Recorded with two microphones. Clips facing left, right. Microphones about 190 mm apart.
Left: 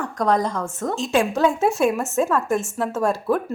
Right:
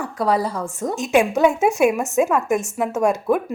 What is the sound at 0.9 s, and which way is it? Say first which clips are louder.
A woman's voice: right 3 dB; 20° right (ahead or behind).